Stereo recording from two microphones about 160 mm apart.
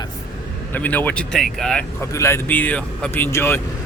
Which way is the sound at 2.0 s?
15° left (ahead or behind).